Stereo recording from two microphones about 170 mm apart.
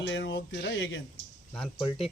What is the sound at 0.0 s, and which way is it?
Speech, 90° left.